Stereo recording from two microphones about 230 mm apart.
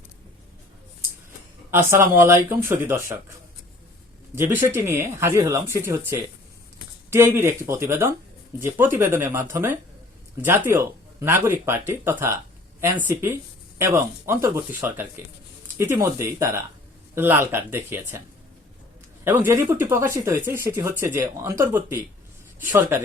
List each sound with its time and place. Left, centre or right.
1.7 s speech: centre
4.4 s speech: centre
7.1 s speech: centre
19.2 s speech: centre